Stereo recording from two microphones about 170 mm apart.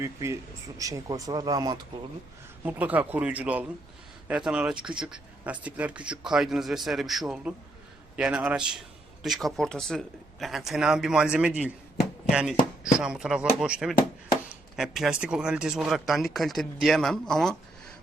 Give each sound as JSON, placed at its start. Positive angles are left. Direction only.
{"t": 0.0, "sound": "speech", "side_deg": -15}
{"t": 2.6, "sound": "speech", "side_deg": -10}